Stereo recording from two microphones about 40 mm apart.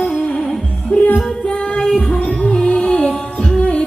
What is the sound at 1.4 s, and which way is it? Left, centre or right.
Music, left.